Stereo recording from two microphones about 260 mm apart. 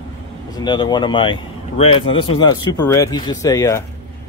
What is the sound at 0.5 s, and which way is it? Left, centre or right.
Speech, centre.